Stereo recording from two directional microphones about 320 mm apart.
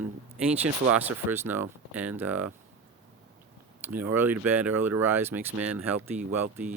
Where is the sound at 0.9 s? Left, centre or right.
Centre.